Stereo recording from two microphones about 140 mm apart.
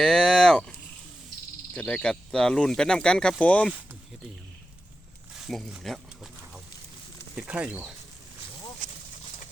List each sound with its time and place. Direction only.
0.0 s speech: 5° left (ahead or behind)
5.3 s speech: centre (ahead or behind)
7.3 s speech: 10° right (ahead or behind)
8.8 s a sound: 65° right (ahead or behind)